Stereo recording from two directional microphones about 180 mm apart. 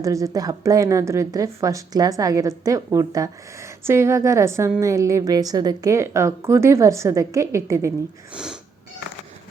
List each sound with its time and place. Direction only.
0.0 s a woman's voice: 20° right (ahead or behind)